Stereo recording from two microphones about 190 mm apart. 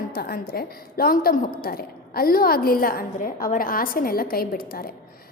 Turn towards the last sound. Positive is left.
turn(degrees=50)  # may be behind; listen again after turning